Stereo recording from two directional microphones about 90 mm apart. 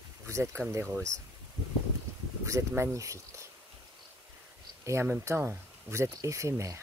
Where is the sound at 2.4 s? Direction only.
30° right (ahead or behind).